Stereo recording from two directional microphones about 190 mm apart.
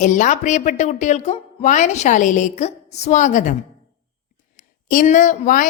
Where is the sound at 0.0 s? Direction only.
40° left (ahead or behind).